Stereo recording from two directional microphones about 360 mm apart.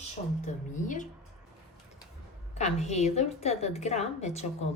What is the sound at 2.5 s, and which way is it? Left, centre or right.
A woman's voice, centre.